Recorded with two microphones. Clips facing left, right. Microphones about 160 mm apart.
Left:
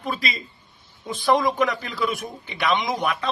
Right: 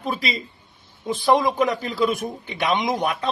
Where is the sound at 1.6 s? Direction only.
30° right (ahead or behind).